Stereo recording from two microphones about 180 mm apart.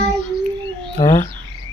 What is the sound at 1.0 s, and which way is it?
Speech, 20° left (ahead or behind).